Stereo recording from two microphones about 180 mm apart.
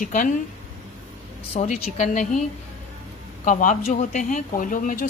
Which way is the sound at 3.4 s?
45° left (ahead or behind).